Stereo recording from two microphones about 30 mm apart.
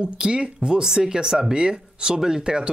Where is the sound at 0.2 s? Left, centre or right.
Right.